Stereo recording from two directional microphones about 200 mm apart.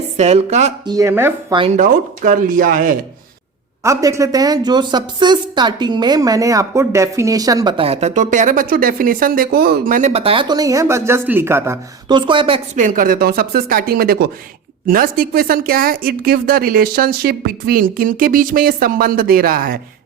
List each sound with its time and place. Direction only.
0.2 s speech: 35° right (ahead or behind)
0.9 s speech: 15° right (ahead or behind)
1.5 s a woman's voice: 30° right (ahead or behind)
1.8 s speech: 40° right (ahead or behind)
3.8 s a woman's voice: 15° right (ahead or behind); by 19.8 s 45° right (ahead or behind)